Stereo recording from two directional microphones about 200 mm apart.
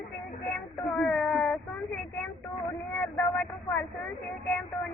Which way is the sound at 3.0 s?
Centre (ahead or behind).